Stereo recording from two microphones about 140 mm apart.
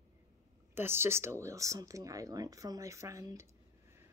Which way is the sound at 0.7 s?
15° right (ahead or behind).